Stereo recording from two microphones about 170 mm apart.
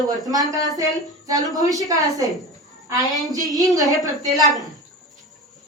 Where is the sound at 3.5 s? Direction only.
20° right (ahead or behind).